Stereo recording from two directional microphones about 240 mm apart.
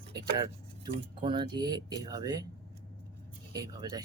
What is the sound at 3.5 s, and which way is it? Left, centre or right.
Speech, centre.